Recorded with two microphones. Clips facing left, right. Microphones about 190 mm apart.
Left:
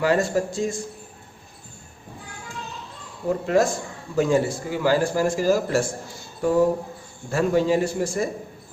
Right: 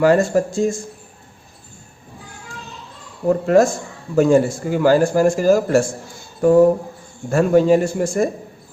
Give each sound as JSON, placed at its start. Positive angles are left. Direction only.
{"t": 0.0, "sound": "a man's voice", "side_deg": -50}
{"t": 3.2, "sound": "a man's voice", "side_deg": -50}
{"t": 7.3, "sound": "a man's voice", "side_deg": -50}